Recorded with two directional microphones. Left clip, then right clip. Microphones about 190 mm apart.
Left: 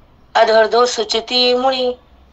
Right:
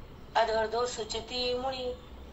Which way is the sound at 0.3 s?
45° left (ahead or behind).